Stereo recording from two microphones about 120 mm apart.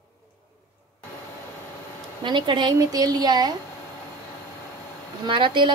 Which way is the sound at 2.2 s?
40° right (ahead or behind).